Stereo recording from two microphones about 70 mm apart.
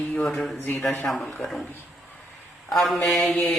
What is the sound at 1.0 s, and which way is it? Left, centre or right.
Speech, centre.